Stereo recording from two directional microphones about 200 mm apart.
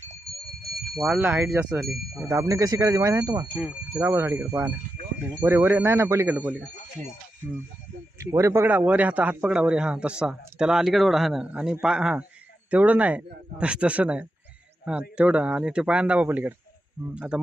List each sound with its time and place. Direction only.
0.9 s speech: centre (ahead or behind)
8.2 s speech: 15° right (ahead or behind)